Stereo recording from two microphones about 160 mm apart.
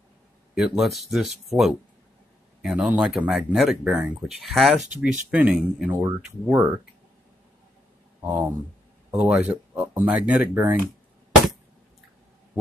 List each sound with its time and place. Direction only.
0.6 s speech: centre (ahead or behind)
6.0 s speech: 20° right (ahead or behind)
8.2 s speech: 10° right (ahead or behind)